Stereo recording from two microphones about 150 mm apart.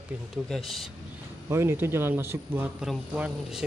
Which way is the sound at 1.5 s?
15° right (ahead or behind).